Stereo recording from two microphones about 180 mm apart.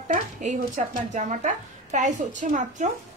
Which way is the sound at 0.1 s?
40° right (ahead or behind).